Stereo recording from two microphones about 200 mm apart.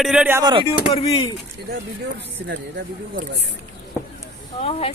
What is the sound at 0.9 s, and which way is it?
Speech, 30° left (ahead or behind).